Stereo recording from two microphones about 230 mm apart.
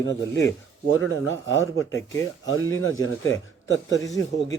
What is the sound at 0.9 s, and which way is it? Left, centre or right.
Speech, left.